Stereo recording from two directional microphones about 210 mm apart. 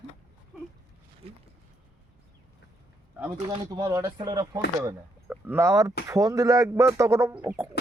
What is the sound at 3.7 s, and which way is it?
Speech, 15° right (ahead or behind).